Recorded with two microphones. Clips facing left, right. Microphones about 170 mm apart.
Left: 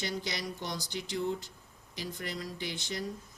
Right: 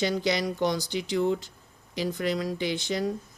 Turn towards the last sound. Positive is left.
turn(degrees=-90)